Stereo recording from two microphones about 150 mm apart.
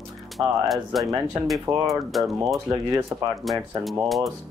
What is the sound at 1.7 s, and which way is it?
Speech, 20° right (ahead or behind).